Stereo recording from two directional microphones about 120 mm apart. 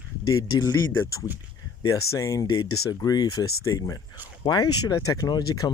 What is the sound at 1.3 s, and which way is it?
Speech, 15° right (ahead or behind).